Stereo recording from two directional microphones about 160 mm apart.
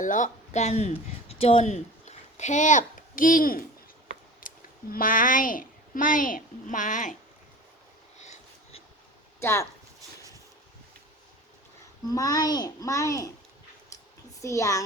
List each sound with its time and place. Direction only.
0.0 s a child's voice: 50° left (ahead or behind)
8.2 s a sound: 45° left (ahead or behind)
9.4 s speech: 15° left (ahead or behind)
12.0 s a child's voice: 20° left (ahead or behind)
14.4 s a child's voice: 20° left (ahead or behind)